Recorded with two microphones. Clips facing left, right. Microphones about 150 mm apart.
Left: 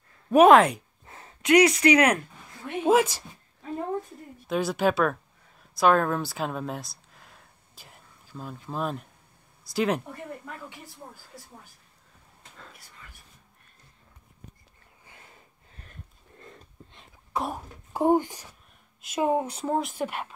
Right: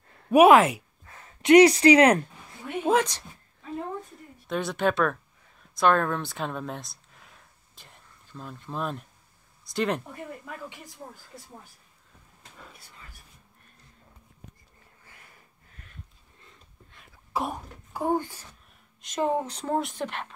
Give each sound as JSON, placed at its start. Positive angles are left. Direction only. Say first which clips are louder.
{"t": 0.3, "sound": "a woman's voice", "louder": "even", "side_deg": -10}
{"t": 1.1, "sound": "a sound", "louder": "left 2 dB", "side_deg": 25}
{"t": 1.4, "sound": "speech", "louder": "right 4 dB", "side_deg": -30}
{"t": 2.8, "sound": "speech", "louder": "left 3 dB", "side_deg": 5}
{"t": 4.5, "sound": "a woman's voice", "louder": "left 2 dB", "side_deg": 5}
{"t": 15.0, "sound": "snort", "louder": "left 4 dB", "side_deg": 25}
{"t": 15.9, "sound": "a sound", "louder": "left 2 dB", "side_deg": 50}
{"t": 17.3, "sound": "cough", "louder": "even", "side_deg": 0}
{"t": 17.9, "sound": "speech", "louder": "left 5 dB", "side_deg": 20}